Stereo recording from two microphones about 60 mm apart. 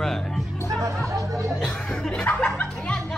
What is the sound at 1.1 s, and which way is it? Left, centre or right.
Music, right.